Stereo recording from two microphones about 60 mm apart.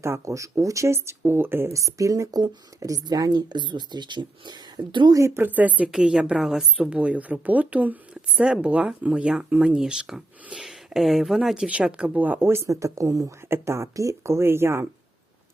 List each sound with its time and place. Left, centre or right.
0.0 s speech: right
1.7 s a woman's voice: right
5.1 s speech: right
5.4 s speech: right
5.9 s speech: centre
8.1 s speech: centre
11.5 s speech: centre
12.1 s speech: right
12.4 s speech: right
12.6 s speech: right